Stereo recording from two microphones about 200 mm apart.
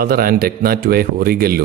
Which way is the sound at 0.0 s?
50° right (ahead or behind).